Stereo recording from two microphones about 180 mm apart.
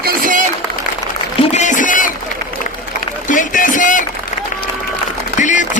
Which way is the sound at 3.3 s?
45° left (ahead or behind).